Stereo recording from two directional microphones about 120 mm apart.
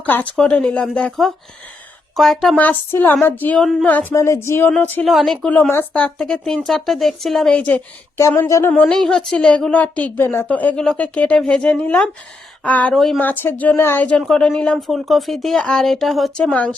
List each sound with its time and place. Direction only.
0.0 s a woman's voice: 15° left (ahead or behind)
2.6 s a woman's voice: 15° left (ahead or behind)
5.0 s speech: centre (ahead or behind)
8.4 s speech: 25° left (ahead or behind)
8.7 s a woman's voice: 10° left (ahead or behind)
12.9 s speech: centre (ahead or behind)
13.1 s a woman's voice: 15° left (ahead or behind); by 16.5 s centre (ahead or behind)
16.5 s a woman's voice: 10° left (ahead or behind)